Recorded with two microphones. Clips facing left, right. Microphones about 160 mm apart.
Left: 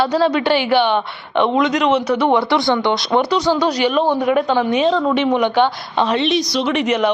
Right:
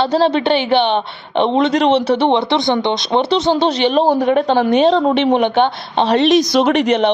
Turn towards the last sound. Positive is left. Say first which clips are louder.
# right 4 dB
turn(degrees=-30)  # may be behind; listen again after turning